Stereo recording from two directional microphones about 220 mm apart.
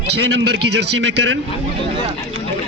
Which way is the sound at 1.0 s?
55° right (ahead or behind).